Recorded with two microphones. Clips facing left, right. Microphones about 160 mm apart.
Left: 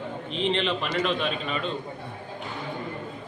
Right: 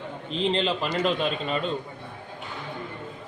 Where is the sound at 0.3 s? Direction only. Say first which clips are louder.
Right 1 dB; 35° right (ahead or behind).